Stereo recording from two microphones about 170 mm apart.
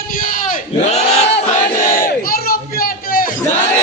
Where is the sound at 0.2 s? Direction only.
55° left (ahead or behind).